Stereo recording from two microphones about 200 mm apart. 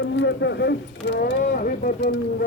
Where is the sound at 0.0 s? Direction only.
60° left (ahead or behind).